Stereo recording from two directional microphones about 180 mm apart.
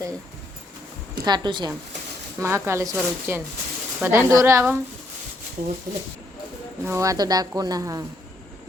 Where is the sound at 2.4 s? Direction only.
15° right (ahead or behind).